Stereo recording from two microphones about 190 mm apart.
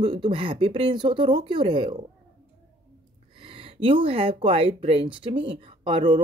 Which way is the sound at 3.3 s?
30° right (ahead or behind).